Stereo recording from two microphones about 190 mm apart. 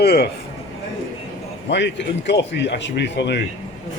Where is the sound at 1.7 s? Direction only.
65° left (ahead or behind).